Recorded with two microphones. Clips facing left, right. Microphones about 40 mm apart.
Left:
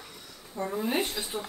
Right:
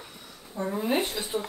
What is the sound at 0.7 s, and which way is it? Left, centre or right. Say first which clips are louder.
Speech: right 2 dB; centre.